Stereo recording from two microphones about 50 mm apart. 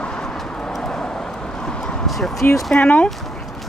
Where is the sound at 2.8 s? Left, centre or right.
Left.